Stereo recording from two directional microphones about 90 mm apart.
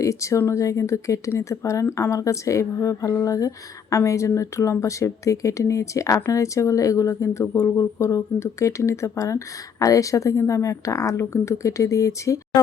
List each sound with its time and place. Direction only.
0.0 s speech: 35° left (ahead or behind)